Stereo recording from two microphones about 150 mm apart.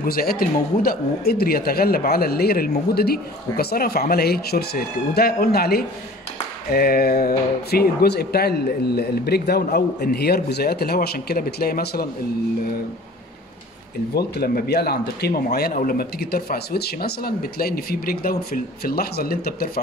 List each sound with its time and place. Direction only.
0.0 s speech: 85° left
14.1 s speech: 90° left